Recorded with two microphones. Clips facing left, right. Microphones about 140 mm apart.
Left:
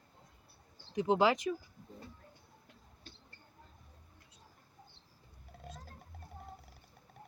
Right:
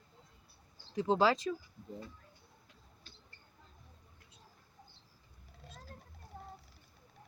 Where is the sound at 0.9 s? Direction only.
20° left (ahead or behind).